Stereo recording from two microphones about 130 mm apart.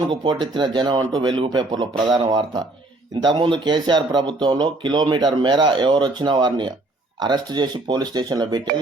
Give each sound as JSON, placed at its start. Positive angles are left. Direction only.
{"t": 0.1, "sound": "speech", "side_deg": -35}